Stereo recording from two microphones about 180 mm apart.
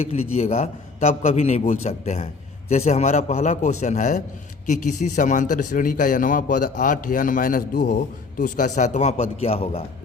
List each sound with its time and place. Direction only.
0.0 s a man's voice: 35° left (ahead or behind)